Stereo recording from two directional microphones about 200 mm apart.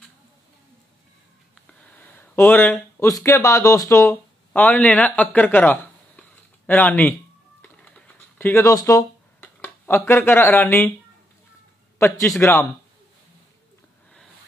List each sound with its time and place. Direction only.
1.7 s speech: 10° left (ahead or behind)
7.6 s a sound: 5° left (ahead or behind)
12.0 s a man's voice: 15° left (ahead or behind)